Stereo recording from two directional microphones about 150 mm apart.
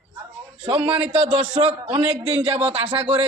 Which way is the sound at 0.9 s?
40° right (ahead or behind).